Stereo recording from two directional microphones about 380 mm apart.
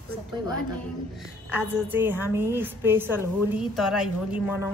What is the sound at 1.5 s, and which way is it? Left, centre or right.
A woman's voice, centre.